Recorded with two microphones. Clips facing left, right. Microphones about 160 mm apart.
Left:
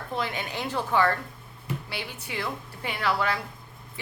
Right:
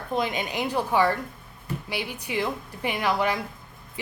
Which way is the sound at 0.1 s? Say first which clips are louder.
Right 4 dB; 20° right (ahead or behind).